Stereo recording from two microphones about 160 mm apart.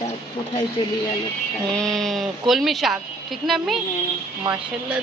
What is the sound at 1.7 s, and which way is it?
Speech, 5° left (ahead or behind).